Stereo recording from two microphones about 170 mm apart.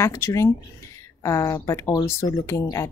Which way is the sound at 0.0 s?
15° left (ahead or behind).